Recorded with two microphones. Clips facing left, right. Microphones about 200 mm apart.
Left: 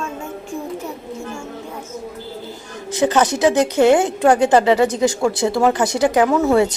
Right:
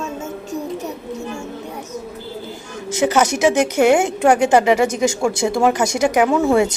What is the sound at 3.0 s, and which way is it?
Speech, 15° right (ahead or behind).